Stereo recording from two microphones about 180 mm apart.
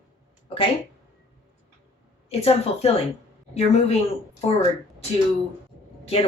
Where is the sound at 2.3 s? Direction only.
35° left (ahead or behind).